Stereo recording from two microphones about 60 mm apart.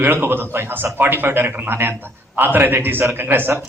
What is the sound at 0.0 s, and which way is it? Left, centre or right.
A man's voice, right.